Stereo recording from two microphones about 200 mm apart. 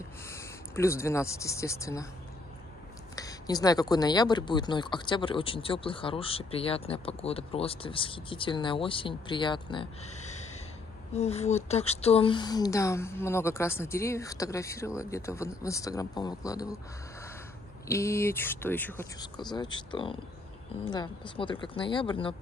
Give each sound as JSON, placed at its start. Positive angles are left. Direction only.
{"t": 0.3, "sound": "speech", "side_deg": 15}
{"t": 3.2, "sound": "speech", "side_deg": 20}
{"t": 11.1, "sound": "speech", "side_deg": 30}
{"t": 17.8, "sound": "speech", "side_deg": 15}
{"t": 19.1, "sound": "speech", "side_deg": 20}